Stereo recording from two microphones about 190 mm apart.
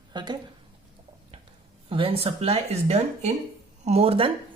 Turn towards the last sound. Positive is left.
turn(degrees=-30)  # may be behind; listen again after turning